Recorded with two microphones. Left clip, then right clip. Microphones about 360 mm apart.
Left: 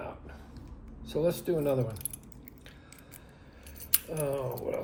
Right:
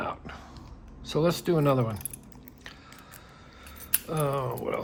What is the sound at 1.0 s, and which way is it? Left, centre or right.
Speech, right.